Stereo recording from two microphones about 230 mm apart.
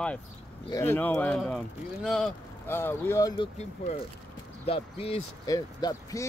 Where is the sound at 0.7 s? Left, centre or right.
Centre.